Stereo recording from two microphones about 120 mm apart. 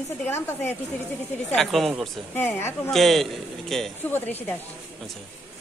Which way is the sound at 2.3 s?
20° left (ahead or behind).